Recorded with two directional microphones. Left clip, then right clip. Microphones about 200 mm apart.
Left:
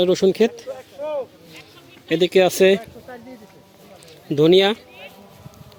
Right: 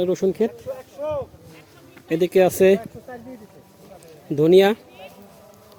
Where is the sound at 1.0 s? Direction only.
25° right (ahead or behind).